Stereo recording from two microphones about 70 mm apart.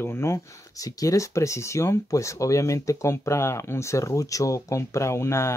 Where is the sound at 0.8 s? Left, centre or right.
Left.